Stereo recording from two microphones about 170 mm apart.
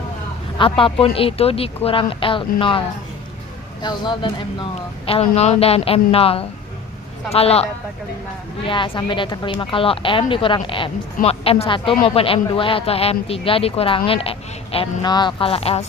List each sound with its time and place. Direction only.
0.6 s a woman's voice: 30° left (ahead or behind)